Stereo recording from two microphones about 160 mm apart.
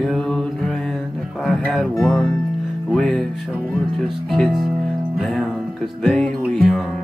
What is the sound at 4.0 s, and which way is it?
Speech, centre (ahead or behind).